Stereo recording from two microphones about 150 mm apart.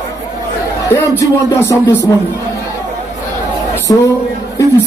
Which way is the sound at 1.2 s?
20° left (ahead or behind).